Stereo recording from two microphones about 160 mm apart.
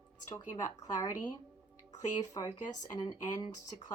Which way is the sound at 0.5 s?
25° left (ahead or behind).